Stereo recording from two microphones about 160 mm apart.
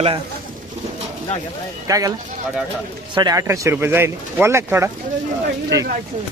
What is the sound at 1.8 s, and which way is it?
Speech, 20° right (ahead or behind).